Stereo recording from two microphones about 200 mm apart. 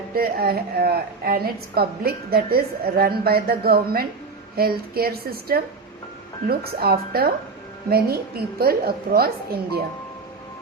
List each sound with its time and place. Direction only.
0.1 s a woman's voice: 50° right (ahead or behind)